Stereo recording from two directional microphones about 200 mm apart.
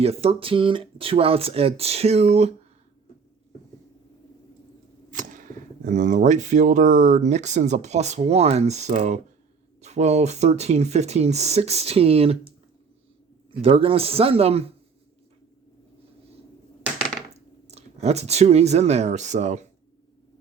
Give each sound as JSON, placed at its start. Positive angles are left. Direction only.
{"t": 0.0, "sound": "speech", "side_deg": -30}
{"t": 5.1, "sound": "speech", "side_deg": -40}
{"t": 13.6, "sound": "speech", "side_deg": -30}
{"t": 17.3, "sound": "speech", "side_deg": -30}